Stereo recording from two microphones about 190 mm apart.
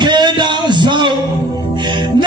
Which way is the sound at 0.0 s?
25° right (ahead or behind).